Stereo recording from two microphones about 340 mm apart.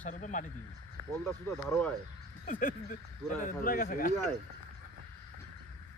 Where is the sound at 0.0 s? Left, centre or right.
Left.